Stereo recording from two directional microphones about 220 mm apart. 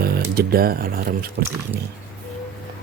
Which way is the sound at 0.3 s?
45° right (ahead or behind).